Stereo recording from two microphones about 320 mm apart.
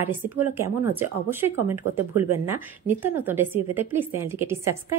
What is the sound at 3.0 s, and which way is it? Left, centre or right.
A woman's voice, centre.